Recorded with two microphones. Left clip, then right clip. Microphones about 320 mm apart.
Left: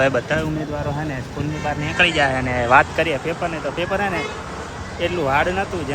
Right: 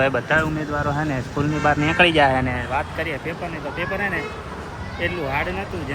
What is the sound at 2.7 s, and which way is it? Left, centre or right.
Speech, centre.